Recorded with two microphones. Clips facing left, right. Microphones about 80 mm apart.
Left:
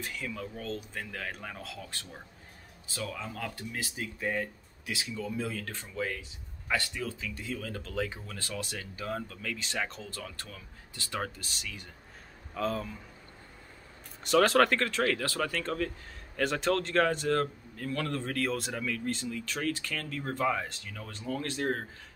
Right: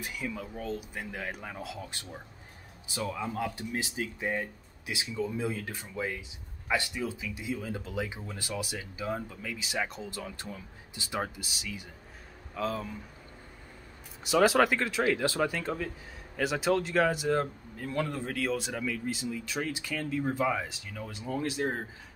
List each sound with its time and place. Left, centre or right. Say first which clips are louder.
0.0 s a man's voice: right 1 dB; centre
14.2 s a man's voice: even; centre